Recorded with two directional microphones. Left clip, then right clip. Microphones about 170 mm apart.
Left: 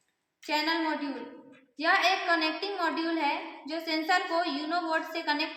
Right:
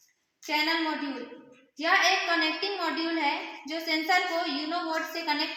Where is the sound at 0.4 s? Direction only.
25° right (ahead or behind).